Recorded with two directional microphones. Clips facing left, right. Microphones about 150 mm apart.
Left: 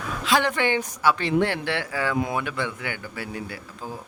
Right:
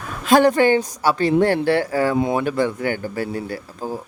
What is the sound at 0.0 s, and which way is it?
Speech, 45° right (ahead or behind).